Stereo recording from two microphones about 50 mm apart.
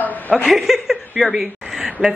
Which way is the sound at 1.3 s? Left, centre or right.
Centre.